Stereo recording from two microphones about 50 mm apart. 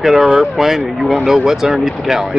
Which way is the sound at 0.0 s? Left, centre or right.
Centre.